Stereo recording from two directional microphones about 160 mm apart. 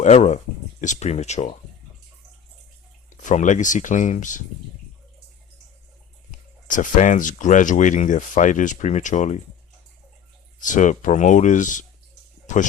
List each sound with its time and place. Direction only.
0.0 s speech: 45° left (ahead or behind)
3.1 s speech: 50° left (ahead or behind)
6.7 s speech: 55° left (ahead or behind)
10.6 s speech: 50° left (ahead or behind)